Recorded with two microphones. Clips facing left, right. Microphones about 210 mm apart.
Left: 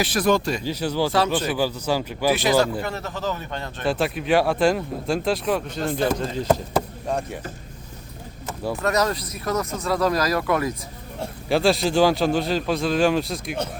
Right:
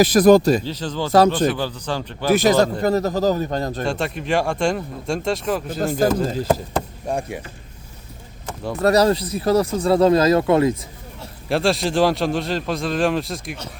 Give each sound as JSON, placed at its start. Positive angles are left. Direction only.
{"t": 0.0, "sound": "speech", "side_deg": -40}
{"t": 0.6, "sound": "a man's voice", "side_deg": 10}
{"t": 2.3, "sound": "speech", "side_deg": -45}
{"t": 3.8, "sound": "a man's voice", "side_deg": 5}
{"t": 8.4, "sound": "a sound", "side_deg": 5}
{"t": 8.8, "sound": "speech", "side_deg": -35}
{"t": 11.4, "sound": "a man's voice", "side_deg": 0}